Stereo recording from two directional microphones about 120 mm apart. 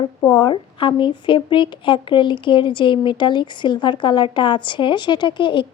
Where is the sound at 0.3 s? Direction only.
40° left (ahead or behind).